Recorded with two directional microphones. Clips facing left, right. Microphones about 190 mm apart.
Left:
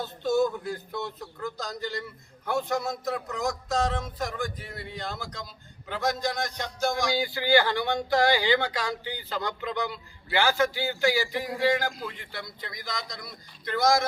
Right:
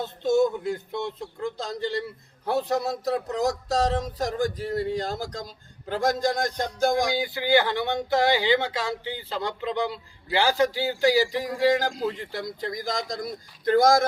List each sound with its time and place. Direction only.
0.0 s speech: 25° right (ahead or behind); by 7.1 s 50° right (ahead or behind)
7.1 s speech: 20° right (ahead or behind); by 14.0 s 50° right (ahead or behind)